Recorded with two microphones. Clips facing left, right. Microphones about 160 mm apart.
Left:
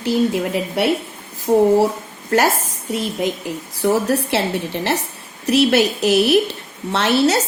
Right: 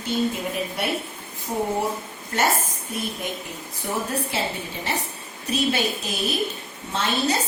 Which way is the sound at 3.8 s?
80° left.